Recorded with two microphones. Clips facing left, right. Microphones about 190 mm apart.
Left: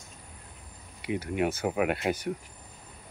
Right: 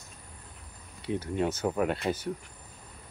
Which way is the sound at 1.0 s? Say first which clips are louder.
Left 1 dB; 10° left (ahead or behind).